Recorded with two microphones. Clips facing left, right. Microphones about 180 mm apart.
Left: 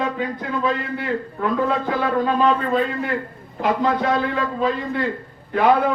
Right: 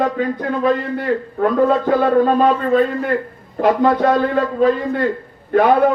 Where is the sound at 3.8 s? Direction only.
55° right (ahead or behind).